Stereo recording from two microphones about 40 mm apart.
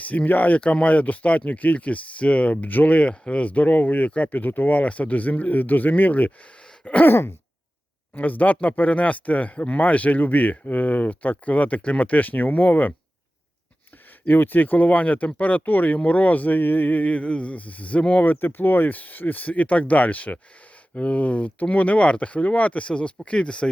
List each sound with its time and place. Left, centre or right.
0.0 s speech: left
0.6 s speech: left
7.0 s a sound: left
8.1 s speech: left
14.3 s speech: left
18.2 s speech: left